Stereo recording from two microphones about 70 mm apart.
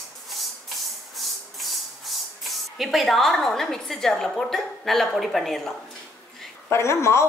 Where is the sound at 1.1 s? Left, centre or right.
Centre.